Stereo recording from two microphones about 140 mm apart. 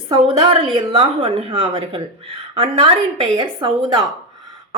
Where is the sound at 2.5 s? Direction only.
45° right (ahead or behind).